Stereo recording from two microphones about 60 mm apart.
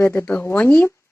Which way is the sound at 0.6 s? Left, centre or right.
Left.